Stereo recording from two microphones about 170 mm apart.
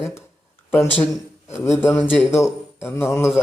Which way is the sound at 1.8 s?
10° left (ahead or behind).